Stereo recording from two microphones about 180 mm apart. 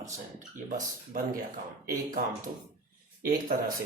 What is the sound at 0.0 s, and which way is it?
Speech, 45° right (ahead or behind).